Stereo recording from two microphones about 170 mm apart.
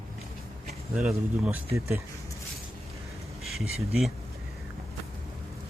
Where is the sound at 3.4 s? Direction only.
Centre (ahead or behind).